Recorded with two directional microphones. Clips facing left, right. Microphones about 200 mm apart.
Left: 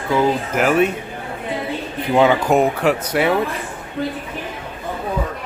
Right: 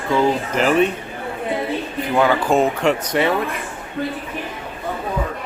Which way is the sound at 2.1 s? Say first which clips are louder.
Left 2 dB; 20° left (ahead or behind).